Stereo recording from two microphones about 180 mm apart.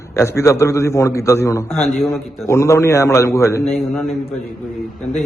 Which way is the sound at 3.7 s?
Centre (ahead or behind).